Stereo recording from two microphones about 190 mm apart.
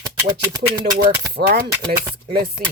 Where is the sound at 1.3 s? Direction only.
60° right (ahead or behind).